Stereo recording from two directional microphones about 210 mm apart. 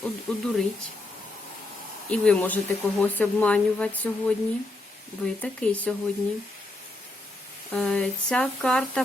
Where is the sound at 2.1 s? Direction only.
5° left (ahead or behind).